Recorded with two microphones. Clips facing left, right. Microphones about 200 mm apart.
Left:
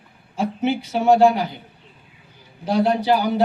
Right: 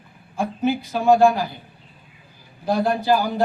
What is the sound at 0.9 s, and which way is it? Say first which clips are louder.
Speech: left 1 dB; 20° left (ahead or behind).